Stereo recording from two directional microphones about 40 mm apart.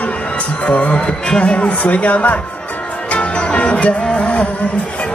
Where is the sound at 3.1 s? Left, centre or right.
Left.